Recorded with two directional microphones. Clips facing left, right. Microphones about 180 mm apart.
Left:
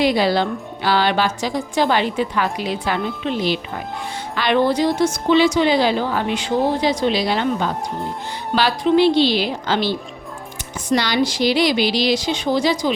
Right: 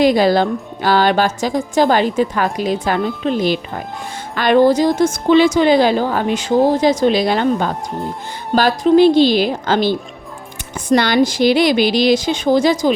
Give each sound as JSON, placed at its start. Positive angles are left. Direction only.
{"t": 0.0, "sound": "a woman's voice", "side_deg": -45}